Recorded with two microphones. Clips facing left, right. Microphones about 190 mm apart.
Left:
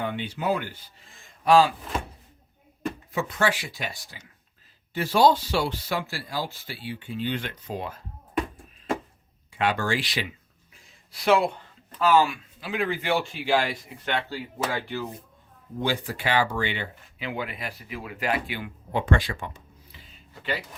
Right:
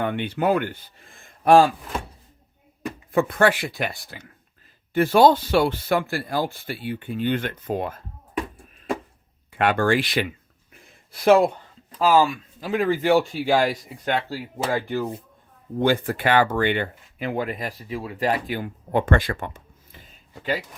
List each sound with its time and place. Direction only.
0.0 s a man's voice: 60° right (ahead or behind)
3.1 s a man's voice: 55° right (ahead or behind)
9.5 s a man's voice: 55° right (ahead or behind)